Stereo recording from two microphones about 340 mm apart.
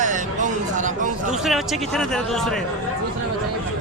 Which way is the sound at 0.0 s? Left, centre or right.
Right.